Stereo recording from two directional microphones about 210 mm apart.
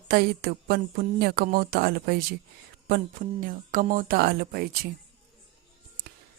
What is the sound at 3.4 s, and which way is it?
Speech, 40° right (ahead or behind).